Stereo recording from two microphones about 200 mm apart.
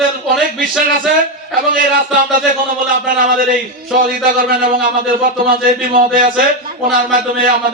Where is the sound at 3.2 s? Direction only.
45° right (ahead or behind).